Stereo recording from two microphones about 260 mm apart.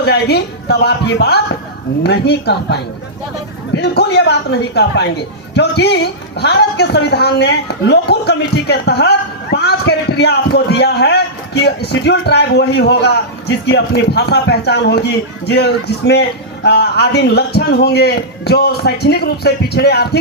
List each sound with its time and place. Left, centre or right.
0.0 s a man's voice: left